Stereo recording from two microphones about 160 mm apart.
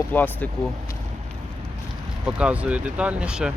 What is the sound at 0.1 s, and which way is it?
Speech, 10° left (ahead or behind).